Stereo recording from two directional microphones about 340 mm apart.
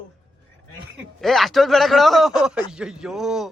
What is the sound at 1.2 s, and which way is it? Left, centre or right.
A man's voice, centre.